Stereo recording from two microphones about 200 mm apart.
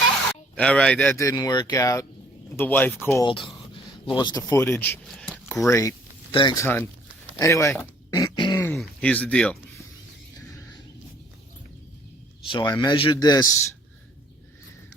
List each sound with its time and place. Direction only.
0.5 s speech: 5° left (ahead or behind)
3.2 s a man's voice: 25° left (ahead or behind); by 5.4 s centre (ahead or behind)
5.6 s speech: 15° left (ahead or behind)
7.3 s a sound: 15° left (ahead or behind)
8.6 s a sound: 5° left (ahead or behind)
12.5 s a man's voice: 20° left (ahead or behind)